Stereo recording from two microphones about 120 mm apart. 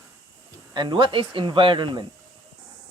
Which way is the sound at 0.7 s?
40° right (ahead or behind).